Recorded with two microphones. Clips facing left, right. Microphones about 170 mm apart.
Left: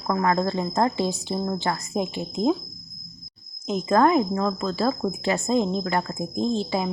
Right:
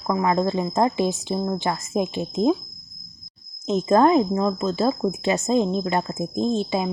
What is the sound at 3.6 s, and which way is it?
Speech, 25° right (ahead or behind).